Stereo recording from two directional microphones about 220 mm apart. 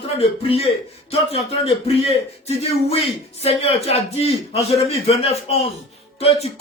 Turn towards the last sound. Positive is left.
turn(degrees=30)  # may be behind; listen again after turning